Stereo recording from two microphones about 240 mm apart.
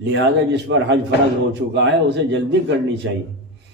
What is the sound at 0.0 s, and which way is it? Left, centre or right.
A man's voice, right.